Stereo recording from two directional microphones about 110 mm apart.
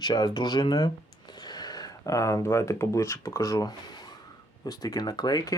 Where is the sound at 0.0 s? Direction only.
40° left (ahead or behind).